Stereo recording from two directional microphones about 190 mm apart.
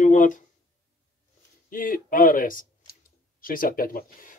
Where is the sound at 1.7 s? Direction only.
45° left (ahead or behind).